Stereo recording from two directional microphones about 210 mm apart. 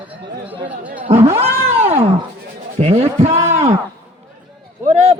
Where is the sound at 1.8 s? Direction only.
30° right (ahead or behind).